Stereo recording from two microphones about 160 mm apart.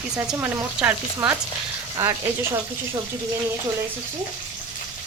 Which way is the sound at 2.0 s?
15° right (ahead or behind).